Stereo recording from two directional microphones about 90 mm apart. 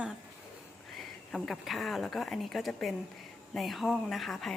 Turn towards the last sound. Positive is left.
turn(degrees=0)  # may be behind; listen again after turning